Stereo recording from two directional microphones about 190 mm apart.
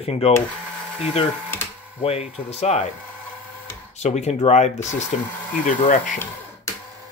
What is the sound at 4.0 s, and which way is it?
Speech, 35° left (ahead or behind).